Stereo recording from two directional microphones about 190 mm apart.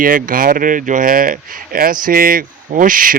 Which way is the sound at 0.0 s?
45° right (ahead or behind).